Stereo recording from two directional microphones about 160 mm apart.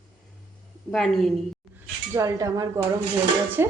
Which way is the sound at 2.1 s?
20° right (ahead or behind).